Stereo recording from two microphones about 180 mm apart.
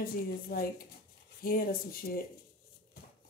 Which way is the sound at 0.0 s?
55° left (ahead or behind).